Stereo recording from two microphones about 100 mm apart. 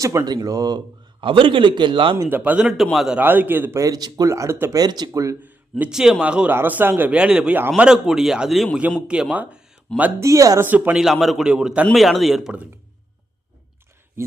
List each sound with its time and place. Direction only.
0.0 s speech: 35° right (ahead or behind)
1.2 s a man's voice: 60° right (ahead or behind)
2.3 s a man's voice: 15° right (ahead or behind)
3.2 s a man's voice: 20° right (ahead or behind)
3.8 s speech: 40° right (ahead or behind)
4.7 s speech: 40° right (ahead or behind)
5.9 s a man's voice: 5° right (ahead or behind)
9.3 s a sound: 15° right (ahead or behind)
10.2 s speech: 30° right (ahead or behind)
10.6 s a man's voice: 20° right (ahead or behind)
10.9 s a man's voice: centre (ahead or behind)